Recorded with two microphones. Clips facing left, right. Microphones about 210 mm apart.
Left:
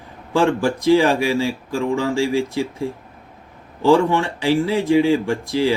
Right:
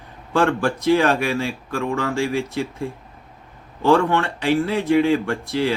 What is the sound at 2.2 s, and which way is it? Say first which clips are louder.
Speech: left 3 dB; 60° right (ahead or behind).